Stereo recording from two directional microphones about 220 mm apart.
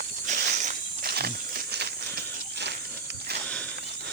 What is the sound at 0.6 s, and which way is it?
Wild animals, 35° right (ahead or behind).